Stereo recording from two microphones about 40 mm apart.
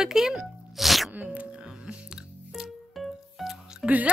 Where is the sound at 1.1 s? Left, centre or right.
Right.